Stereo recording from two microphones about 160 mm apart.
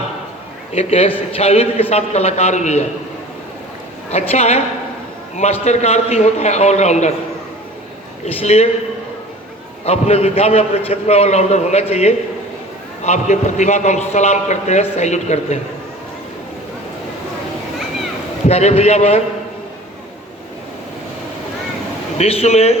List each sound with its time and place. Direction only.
0.7 s a man's voice: 40° left (ahead or behind)
4.1 s a man's voice: 40° left (ahead or behind)
5.6 s a man's voice: 40° left (ahead or behind)
8.2 s a man's voice: 40° left (ahead or behind)
9.8 s a man's voice: 40° left (ahead or behind)
18.4 s a man's voice: 40° left (ahead or behind)
22.2 s a man's voice: 40° left (ahead or behind)